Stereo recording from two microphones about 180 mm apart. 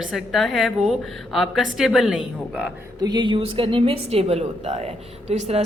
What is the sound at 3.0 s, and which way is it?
A woman's voice, 25° right (ahead or behind).